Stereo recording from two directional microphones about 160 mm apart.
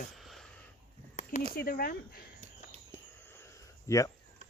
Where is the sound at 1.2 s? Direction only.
50° left (ahead or behind).